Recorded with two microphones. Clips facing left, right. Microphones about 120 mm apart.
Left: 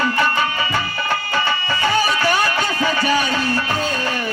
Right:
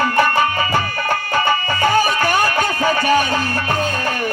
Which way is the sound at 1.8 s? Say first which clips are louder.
Right 2 dB; 50° right (ahead or behind).